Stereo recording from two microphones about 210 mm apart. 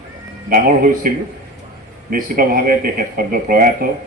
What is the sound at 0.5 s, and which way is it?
Speech, 40° right (ahead or behind).